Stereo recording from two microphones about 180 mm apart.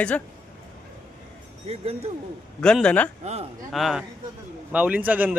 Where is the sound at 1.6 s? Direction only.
35° right (ahead or behind).